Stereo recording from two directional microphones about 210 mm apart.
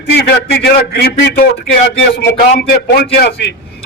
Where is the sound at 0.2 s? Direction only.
50° left (ahead or behind).